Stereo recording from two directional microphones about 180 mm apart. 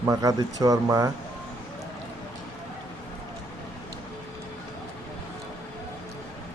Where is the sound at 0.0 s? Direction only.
20° right (ahead or behind).